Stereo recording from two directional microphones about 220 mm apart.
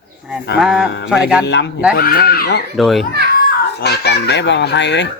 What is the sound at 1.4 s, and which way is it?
Speech, 50° left (ahead or behind).